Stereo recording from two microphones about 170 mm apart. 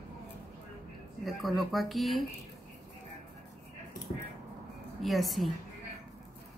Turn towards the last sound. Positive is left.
turn(degrees=0)  # may be behind; listen again after turning